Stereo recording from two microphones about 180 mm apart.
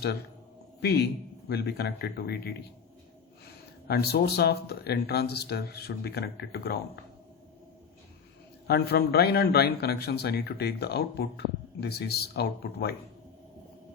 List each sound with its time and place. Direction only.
0.8 s a man's voice: 65° left (ahead or behind)
3.8 s a man's voice: 60° left (ahead or behind)
8.6 s a man's voice: 60° left (ahead or behind)